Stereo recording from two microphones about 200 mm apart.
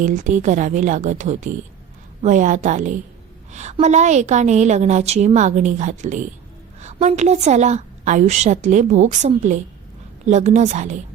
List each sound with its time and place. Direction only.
0.0 s a woman's voice: 40° right (ahead or behind)